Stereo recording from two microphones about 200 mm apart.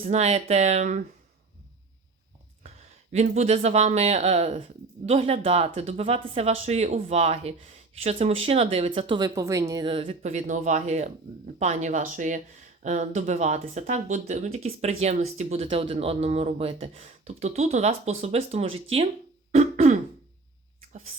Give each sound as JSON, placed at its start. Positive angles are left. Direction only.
{"t": 0.0, "sound": "speech", "side_deg": -35}
{"t": 3.1, "sound": "speech", "side_deg": -35}
{"t": 19.5, "sound": "throat clearing", "side_deg": -35}